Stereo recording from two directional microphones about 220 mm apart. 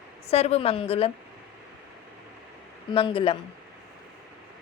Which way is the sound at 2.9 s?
25° left (ahead or behind).